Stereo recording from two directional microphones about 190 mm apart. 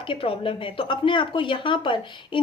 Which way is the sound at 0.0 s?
30° left (ahead or behind).